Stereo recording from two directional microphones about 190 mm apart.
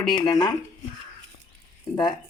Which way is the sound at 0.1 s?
25° left (ahead or behind).